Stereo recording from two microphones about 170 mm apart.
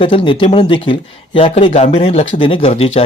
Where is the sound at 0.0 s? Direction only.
30° left (ahead or behind).